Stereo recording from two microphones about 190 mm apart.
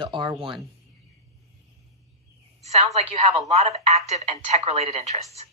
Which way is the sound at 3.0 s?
35° right (ahead or behind).